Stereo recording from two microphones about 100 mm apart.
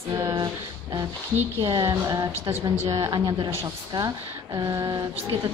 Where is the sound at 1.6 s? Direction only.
50° right (ahead or behind).